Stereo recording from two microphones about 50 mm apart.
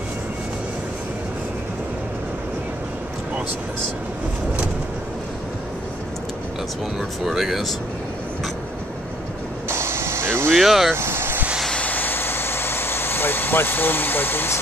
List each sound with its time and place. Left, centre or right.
7.0 s speech: centre
9.7 s vehicle: right
10.6 s speech: centre
11.0 s vehicle: right
11.7 s vehicle: left